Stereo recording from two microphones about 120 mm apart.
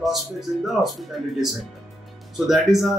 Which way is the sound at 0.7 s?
Centre (ahead or behind).